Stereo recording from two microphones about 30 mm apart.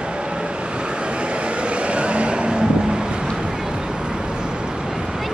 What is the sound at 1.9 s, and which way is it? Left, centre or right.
Vehicle, right.